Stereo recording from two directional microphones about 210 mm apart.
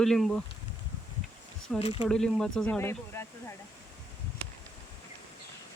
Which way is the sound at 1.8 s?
25° left (ahead or behind).